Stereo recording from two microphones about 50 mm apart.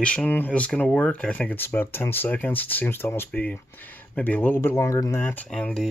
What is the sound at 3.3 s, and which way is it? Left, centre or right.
Speech, left.